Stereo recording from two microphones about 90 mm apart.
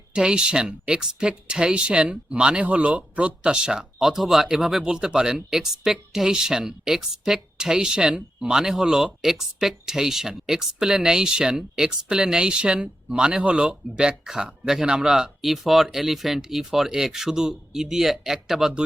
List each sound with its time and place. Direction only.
0.1 s speech: 10° right (ahead or behind)